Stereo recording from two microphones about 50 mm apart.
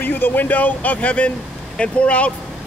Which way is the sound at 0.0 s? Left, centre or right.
Left.